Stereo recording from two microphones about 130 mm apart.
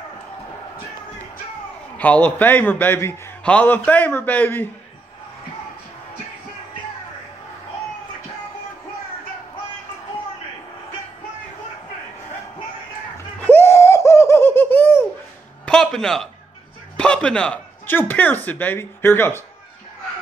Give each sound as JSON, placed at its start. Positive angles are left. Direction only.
{"t": 2.0, "sound": "a man's voice", "side_deg": 10}
{"t": 13.4, "sound": "laughter", "side_deg": 15}
{"t": 15.6, "sound": "music", "side_deg": 5}
{"t": 16.9, "sound": "a man's voice", "side_deg": 10}